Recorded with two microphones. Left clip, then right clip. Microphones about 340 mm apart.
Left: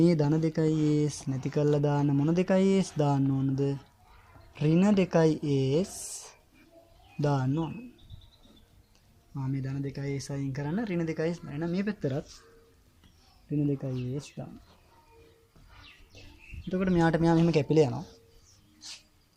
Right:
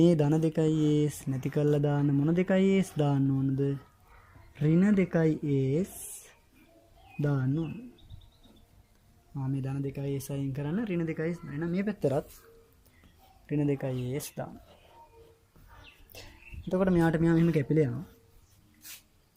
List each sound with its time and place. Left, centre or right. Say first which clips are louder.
0.0 s speech: right 1 dB; centre
4.5 s speech: left 1 dB; centre
7.2 s speech: left 3 dB; centre
9.3 s speech: even; centre
13.6 s speech: right 1 dB; right
14.4 s speech: right 6 dB; right
16.7 s speech: even; centre